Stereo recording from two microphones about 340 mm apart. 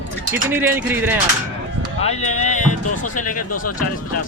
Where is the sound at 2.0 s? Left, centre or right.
Centre.